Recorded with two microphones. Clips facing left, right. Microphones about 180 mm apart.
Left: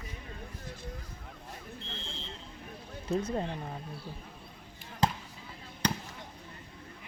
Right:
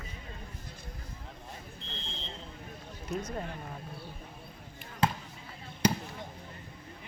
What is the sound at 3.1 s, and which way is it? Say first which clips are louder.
Speech: left 5 dB; 30° left (ahead or behind).